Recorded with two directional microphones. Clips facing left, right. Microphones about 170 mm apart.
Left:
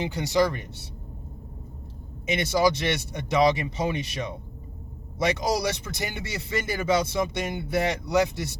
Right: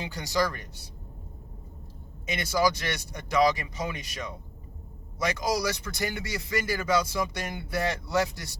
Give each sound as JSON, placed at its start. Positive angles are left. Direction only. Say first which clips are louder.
{"t": 0.0, "sound": "speech", "louder": "left 5 dB", "side_deg": 20}
{"t": 2.2, "sound": "speech", "louder": "left 3 dB", "side_deg": 25}